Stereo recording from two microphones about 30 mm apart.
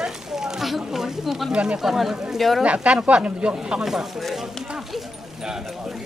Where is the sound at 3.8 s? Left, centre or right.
Centre.